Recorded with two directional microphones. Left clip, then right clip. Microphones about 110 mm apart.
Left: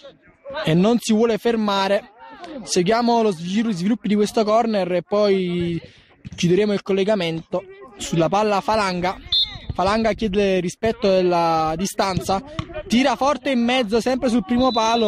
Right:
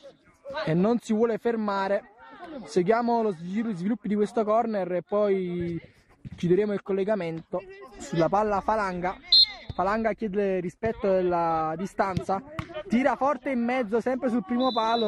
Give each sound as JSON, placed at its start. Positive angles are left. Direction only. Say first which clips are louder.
{"t": 0.6, "sound": "speech", "louder": "left 6 dB", "side_deg": 30}
{"t": 8.4, "sound": "speech", "louder": "left 6 dB", "side_deg": 35}